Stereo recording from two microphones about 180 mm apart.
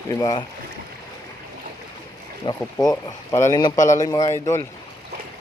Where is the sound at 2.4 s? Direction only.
25° left (ahead or behind).